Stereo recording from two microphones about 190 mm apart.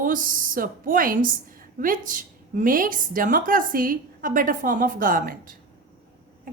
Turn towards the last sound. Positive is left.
turn(degrees=-45)  # may be behind; listen again after turning